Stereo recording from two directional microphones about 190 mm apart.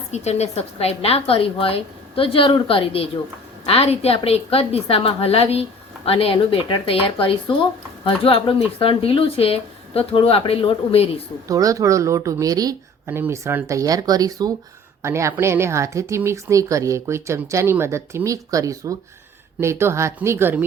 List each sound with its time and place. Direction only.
0.1 s a woman's voice: 35° left (ahead or behind)
11.4 s speech: 15° right (ahead or behind)